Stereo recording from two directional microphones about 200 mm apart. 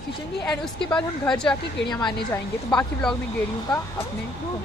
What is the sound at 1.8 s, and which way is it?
Speech, 60° left (ahead or behind).